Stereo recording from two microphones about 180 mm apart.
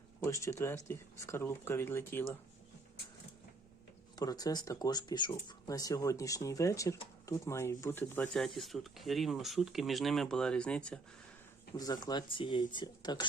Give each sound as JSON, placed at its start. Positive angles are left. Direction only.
{"t": 0.2, "sound": "speech", "side_deg": 15}
{"t": 4.1, "sound": "speech", "side_deg": 20}
{"t": 11.8, "sound": "speech", "side_deg": 20}